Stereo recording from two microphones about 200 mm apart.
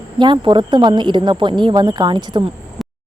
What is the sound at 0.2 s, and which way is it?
Speech, 25° right (ahead or behind).